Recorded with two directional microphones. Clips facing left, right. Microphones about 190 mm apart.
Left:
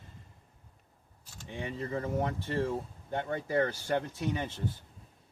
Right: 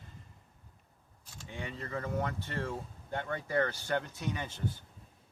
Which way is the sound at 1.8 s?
20° left (ahead or behind).